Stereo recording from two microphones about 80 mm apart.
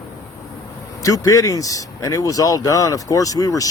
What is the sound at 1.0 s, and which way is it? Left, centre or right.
Speech, left.